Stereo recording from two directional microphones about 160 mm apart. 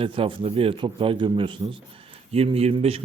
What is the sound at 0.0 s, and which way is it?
A man's voice, 35° right (ahead or behind).